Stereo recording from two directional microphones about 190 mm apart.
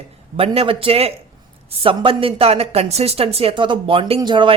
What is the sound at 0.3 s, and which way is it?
Speech, 30° right (ahead or behind).